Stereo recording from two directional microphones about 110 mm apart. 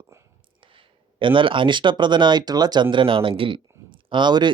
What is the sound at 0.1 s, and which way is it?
Whispering, 25° right (ahead or behind).